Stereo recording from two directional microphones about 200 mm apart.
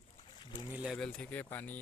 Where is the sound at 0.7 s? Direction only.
Centre (ahead or behind).